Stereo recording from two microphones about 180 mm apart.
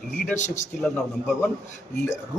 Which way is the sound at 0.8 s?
5° left (ahead or behind).